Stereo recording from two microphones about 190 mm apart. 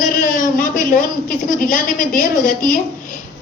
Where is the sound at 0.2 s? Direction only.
45° left (ahead or behind).